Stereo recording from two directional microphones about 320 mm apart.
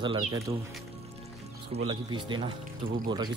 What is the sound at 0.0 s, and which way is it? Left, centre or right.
Speech, centre.